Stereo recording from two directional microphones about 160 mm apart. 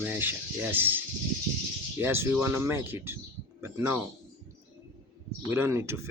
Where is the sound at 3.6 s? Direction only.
15° right (ahead or behind).